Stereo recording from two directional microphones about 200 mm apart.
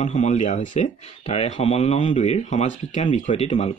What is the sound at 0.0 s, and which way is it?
Speech, 35° left (ahead or behind).